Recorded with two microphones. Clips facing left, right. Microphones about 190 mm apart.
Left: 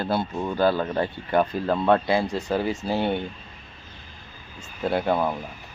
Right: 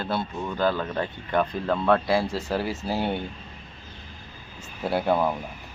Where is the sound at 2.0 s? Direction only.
Centre (ahead or behind).